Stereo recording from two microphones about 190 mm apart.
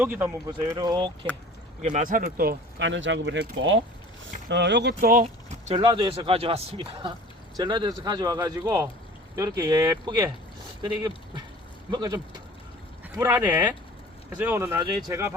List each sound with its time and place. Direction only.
0.0 s speech: 10° right (ahead or behind)
1.8 s speech: 40° right (ahead or behind)
5.2 s speech: 30° right (ahead or behind)
11.9 s speech: 20° right (ahead or behind)
13.1 s speech: 10° right (ahead or behind)